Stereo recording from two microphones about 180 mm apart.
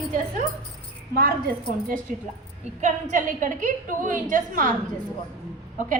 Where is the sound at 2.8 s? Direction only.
45° right (ahead or behind).